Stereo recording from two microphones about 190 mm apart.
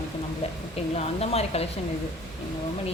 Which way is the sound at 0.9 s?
35° left (ahead or behind).